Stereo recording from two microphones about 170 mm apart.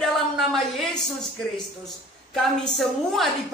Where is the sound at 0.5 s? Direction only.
5° left (ahead or behind).